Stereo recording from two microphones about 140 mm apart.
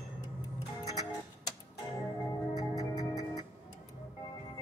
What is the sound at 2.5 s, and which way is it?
Music, 30° left (ahead or behind).